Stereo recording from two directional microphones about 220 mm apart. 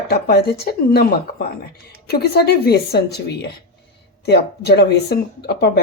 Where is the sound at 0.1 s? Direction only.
45° left (ahead or behind).